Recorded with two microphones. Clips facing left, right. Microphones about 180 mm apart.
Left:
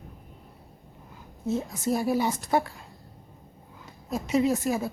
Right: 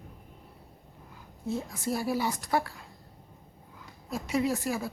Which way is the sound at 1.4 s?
25° left (ahead or behind).